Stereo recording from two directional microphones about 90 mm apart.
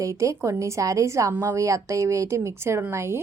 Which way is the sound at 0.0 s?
35° right (ahead or behind).